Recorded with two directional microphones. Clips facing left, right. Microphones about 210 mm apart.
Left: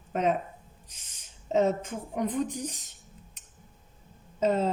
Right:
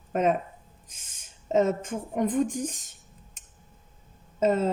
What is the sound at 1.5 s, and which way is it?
Speech, 50° right (ahead or behind).